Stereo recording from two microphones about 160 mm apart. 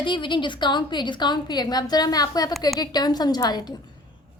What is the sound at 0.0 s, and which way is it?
A woman's voice, 30° left (ahead or behind).